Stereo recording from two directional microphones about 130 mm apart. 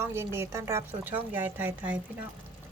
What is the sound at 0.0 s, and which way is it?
Speech, 20° right (ahead or behind).